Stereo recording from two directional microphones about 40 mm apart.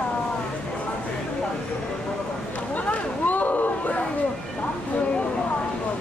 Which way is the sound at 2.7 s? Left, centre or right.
Left.